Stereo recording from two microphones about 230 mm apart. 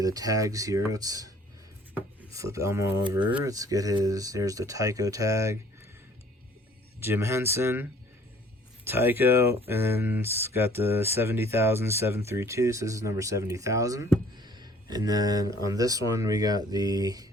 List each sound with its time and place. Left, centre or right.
0.0 s speech: centre
7.0 s speech: centre
8.9 s speech: centre